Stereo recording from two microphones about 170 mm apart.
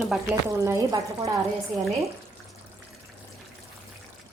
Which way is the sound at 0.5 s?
20° right (ahead or behind).